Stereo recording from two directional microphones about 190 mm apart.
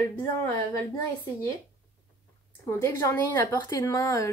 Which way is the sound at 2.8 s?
15° left (ahead or behind).